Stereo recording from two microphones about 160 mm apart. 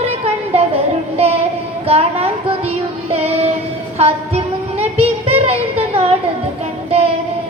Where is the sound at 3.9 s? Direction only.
40° right (ahead or behind).